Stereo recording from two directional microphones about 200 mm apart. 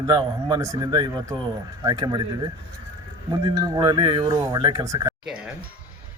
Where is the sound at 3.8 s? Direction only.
25° right (ahead or behind).